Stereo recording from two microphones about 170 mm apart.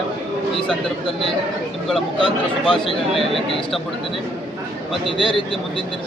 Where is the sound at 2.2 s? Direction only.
30° left (ahead or behind).